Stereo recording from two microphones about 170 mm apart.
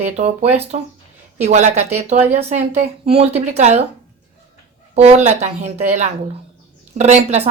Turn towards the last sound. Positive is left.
turn(degrees=-40)  # may be behind; listen again after turning